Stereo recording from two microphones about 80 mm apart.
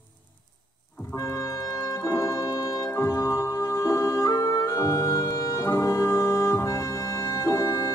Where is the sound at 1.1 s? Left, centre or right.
Left.